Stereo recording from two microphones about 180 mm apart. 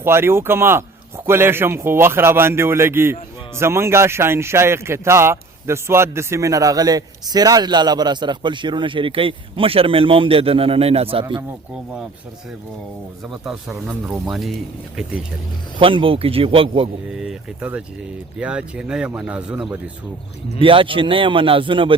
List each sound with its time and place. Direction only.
0.0 s a man's voice: 15° right (ahead or behind)
13.2 s speech: 5° right (ahead or behind)
15.8 s speech: 30° right (ahead or behind)
17.1 s speech: 5° right (ahead or behind)
20.6 s a man's voice: 30° right (ahead or behind)